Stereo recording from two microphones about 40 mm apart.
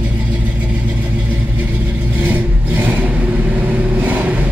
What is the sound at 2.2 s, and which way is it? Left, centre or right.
Vehicle, right.